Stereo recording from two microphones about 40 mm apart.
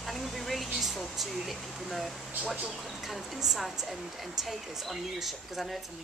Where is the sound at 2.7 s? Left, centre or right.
Centre.